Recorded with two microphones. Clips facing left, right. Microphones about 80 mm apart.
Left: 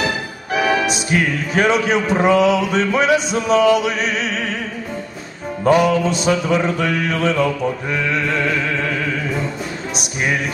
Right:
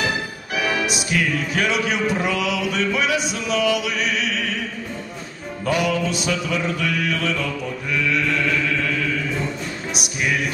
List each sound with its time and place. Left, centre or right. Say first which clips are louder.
0.6 s music: left 5 dB; left
5.6 s music: left 7 dB; left